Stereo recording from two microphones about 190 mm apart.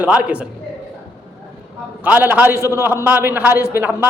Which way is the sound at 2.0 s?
10° right (ahead or behind).